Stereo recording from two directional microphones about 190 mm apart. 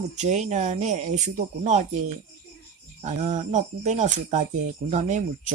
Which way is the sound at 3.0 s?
40° right (ahead or behind).